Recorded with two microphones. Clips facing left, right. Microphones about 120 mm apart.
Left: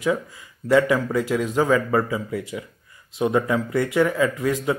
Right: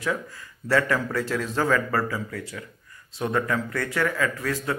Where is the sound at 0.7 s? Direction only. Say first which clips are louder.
Left 5 dB; 10° left (ahead or behind).